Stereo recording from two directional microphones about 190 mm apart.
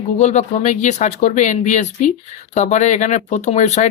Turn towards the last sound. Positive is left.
turn(degrees=40)  # may be behind; listen again after turning